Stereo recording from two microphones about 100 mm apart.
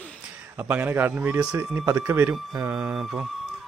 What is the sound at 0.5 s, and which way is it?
A man's voice, 20° right (ahead or behind).